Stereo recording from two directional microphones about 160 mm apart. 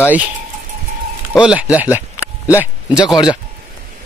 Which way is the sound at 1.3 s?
5° right (ahead or behind).